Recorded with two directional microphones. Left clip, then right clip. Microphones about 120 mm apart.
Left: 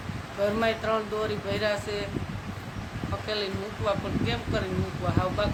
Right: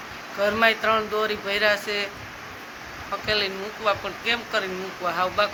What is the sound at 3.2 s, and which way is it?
Speech, 5° left (ahead or behind).